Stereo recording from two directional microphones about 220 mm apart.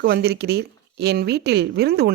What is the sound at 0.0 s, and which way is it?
Speech, 45° right (ahead or behind).